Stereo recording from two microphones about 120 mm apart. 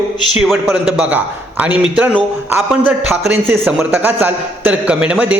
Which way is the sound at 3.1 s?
15° right (ahead or behind).